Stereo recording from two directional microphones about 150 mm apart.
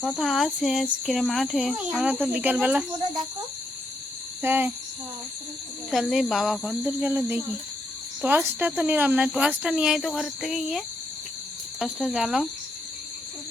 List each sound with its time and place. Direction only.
0.0 s speech: centre (ahead or behind)
4.4 s speech: 10° right (ahead or behind)
5.9 s speech: centre (ahead or behind)
6.8 s speech: 10° right (ahead or behind)